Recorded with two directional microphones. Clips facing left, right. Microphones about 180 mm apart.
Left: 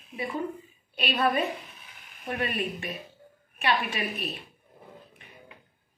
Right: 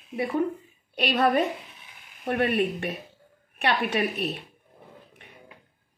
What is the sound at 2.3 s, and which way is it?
A woman's voice, 65° right (ahead or behind).